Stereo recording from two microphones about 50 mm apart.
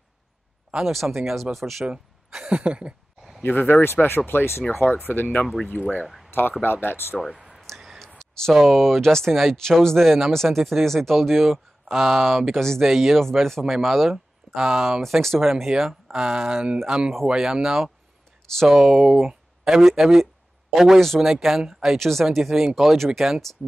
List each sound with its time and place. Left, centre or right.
0.8 s speech: centre
1.9 s speech: centre
3.4 s speech: left
5.8 s speech: right
6.0 s a sound: centre
6.6 s speech: left
7.2 s speech: centre
7.6 s a sound: centre
8.6 s speech: centre
19.1 s a sound: centre
19.8 s speech: centre